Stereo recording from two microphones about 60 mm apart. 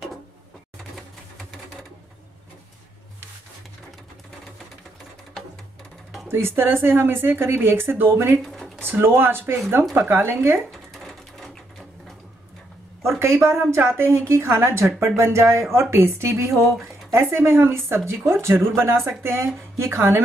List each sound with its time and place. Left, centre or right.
6.2 s speech: right
8.4 s a sound: centre
8.8 s a woman's voice: right
11.0 s sewing machine: centre
13.2 s a woman's voice: right
16.6 s a sound: centre
17.1 s a woman's voice: right